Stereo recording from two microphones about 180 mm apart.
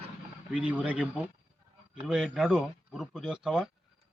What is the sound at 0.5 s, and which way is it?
Speech, 5° right (ahead or behind).